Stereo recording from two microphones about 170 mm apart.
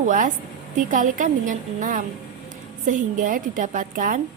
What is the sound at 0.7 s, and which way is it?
A woman's voice, 50° right (ahead or behind).